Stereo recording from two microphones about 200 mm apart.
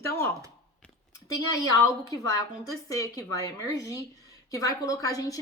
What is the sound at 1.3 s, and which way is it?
A woman's voice, 20° left (ahead or behind).